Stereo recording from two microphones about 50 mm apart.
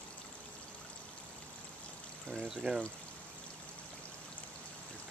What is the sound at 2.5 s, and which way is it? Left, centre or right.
Speech, centre.